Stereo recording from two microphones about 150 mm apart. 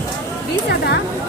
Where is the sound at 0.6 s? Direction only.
90° left.